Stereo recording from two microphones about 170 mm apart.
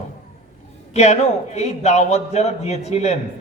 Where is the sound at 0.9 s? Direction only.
40° left (ahead or behind).